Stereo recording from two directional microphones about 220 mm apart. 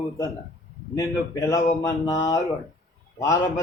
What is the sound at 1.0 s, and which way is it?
A man's voice, 15° left (ahead or behind).